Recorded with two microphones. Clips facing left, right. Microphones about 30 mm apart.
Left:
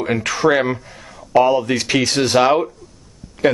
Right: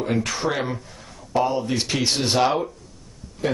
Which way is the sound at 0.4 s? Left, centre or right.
Left.